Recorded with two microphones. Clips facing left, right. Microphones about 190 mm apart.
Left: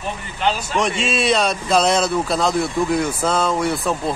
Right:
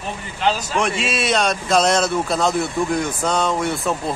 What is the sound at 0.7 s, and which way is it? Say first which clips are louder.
Speech: left 1 dB; centre (ahead or behind).